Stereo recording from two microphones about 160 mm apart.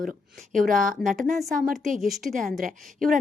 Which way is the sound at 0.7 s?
55° right (ahead or behind).